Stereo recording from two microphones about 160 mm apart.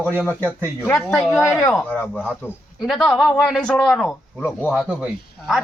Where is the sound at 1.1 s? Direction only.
Centre (ahead or behind).